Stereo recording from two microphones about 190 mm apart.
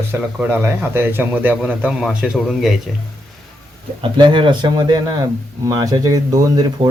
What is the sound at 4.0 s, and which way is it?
Speech, 25° right (ahead or behind).